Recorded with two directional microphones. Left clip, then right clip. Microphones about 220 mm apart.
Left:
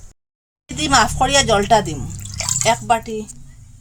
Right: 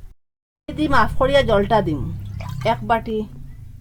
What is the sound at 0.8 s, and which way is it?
Speech, 15° right (ahead or behind).